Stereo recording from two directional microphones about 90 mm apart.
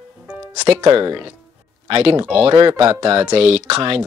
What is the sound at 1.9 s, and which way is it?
Speech, 90° right.